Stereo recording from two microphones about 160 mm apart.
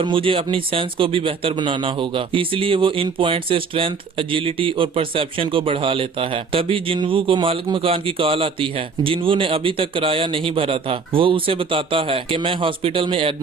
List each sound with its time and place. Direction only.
0.0 s speech: 35° right (ahead or behind)